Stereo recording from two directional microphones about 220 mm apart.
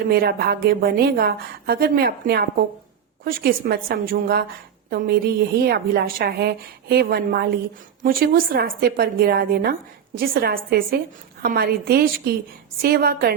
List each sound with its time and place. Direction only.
0.1 s a woman's voice: 45° right (ahead or behind)